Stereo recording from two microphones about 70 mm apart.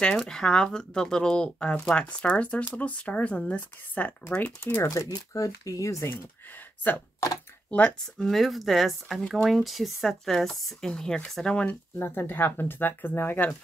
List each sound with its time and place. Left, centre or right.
0.0 s speech: centre
4.7 s speech: left
7.7 s speech: centre
8.2 s speech: centre
12.0 s speech: left